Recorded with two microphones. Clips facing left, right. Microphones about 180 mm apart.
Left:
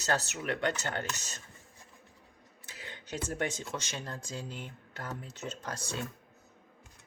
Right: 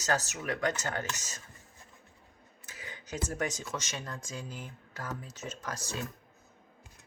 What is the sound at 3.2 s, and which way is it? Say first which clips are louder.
Speech: left 1 dB; 30° left (ahead or behind).